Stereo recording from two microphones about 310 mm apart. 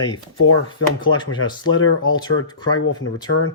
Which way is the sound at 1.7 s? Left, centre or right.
Left.